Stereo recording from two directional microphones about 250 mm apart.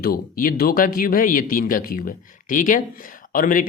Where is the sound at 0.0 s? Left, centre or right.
Left.